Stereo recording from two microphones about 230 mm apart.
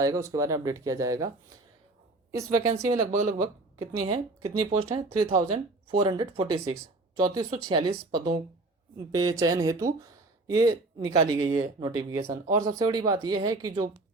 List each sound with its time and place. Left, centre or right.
0.0 s speech: centre
2.3 s speech: centre